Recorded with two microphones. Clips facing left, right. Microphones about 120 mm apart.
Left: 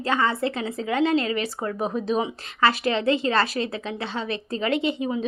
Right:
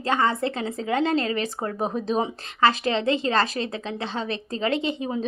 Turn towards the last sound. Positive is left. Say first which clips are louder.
# left 2 dB
turn(degrees=-35)  # may be behind; listen again after turning